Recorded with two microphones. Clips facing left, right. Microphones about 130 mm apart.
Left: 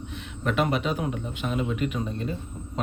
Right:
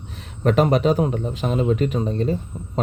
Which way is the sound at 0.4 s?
40° right (ahead or behind).